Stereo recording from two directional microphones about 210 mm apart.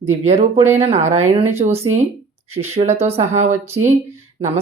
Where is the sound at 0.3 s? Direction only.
30° right (ahead or behind).